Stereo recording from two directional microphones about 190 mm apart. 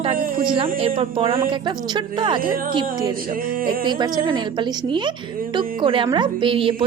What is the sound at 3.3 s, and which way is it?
Music, 50° right (ahead or behind).